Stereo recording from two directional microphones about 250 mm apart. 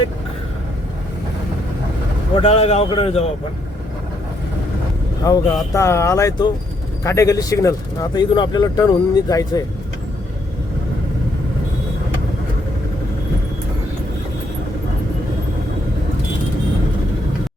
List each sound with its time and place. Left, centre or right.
2.4 s a man's voice: left
5.2 s speech: centre